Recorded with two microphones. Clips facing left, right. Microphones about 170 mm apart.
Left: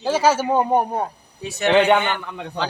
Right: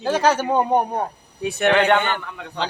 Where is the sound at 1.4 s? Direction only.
60° right (ahead or behind).